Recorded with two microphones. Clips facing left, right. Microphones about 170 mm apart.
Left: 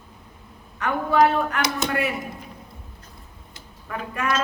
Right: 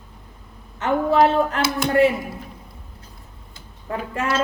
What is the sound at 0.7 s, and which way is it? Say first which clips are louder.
A woman's voice: right 2 dB; 25° right (ahead or behind).